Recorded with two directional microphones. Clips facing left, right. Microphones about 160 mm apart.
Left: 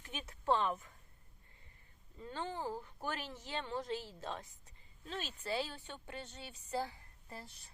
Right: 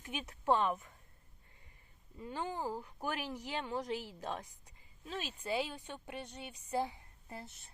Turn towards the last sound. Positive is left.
turn(degrees=-20)  # may be behind; listen again after turning